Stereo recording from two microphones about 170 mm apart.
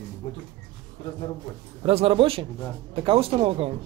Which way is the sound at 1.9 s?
35° right (ahead or behind).